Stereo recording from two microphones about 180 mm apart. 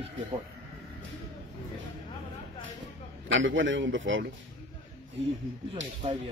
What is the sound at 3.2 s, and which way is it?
Speech, 90° right.